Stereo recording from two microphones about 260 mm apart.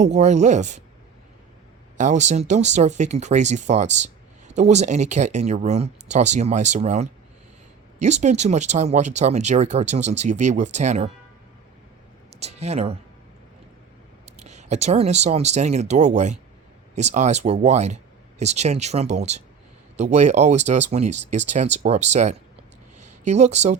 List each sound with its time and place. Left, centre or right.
0.0 s speech: right
2.0 s speech: right
12.4 s speech: right
14.3 s speech: right
23.0 s a sound: right